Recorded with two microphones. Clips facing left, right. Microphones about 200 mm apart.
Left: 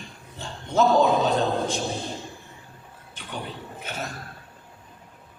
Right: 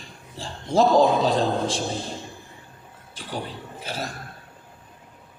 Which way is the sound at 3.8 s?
35° right (ahead or behind).